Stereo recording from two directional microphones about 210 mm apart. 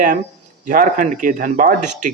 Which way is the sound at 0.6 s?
40° right (ahead or behind).